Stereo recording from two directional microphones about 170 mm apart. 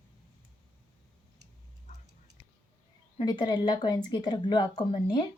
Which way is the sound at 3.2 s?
25° left (ahead or behind).